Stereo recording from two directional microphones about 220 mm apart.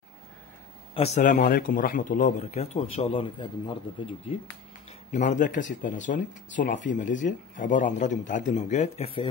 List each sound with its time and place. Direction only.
0.9 s speech: 30° left (ahead or behind)